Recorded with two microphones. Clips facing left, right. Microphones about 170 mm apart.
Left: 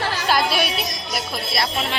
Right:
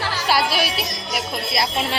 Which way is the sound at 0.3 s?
5° right (ahead or behind).